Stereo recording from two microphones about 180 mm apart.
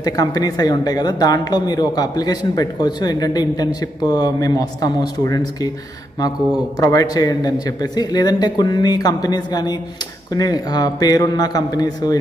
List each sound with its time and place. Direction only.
0.0 s a woman's voice: 20° left (ahead or behind)